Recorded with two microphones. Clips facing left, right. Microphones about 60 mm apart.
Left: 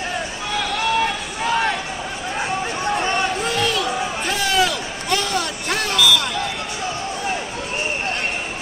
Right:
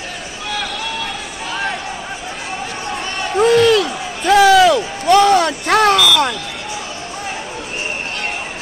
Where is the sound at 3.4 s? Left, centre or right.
Right.